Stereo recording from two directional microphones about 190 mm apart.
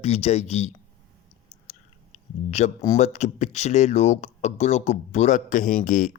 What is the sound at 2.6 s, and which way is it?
Speech, 35° left (ahead or behind).